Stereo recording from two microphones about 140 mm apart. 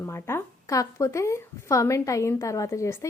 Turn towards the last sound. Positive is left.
turn(degrees=20)  # may be behind; listen again after turning